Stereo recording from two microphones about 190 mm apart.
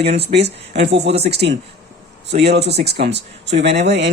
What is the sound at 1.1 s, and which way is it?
Speech, 30° right (ahead or behind).